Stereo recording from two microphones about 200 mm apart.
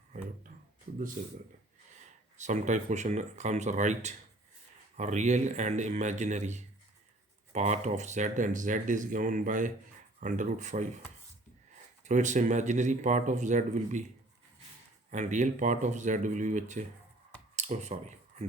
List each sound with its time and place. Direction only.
1.2 s speech: 40° right (ahead or behind)
12.0 s speech: 35° right (ahead or behind)
15.1 s speech: 40° right (ahead or behind)